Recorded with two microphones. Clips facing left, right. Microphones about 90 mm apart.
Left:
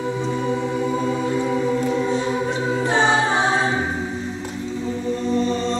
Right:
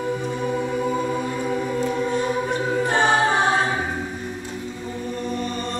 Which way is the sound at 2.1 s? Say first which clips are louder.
Left 1 dB; 55° right (ahead or behind).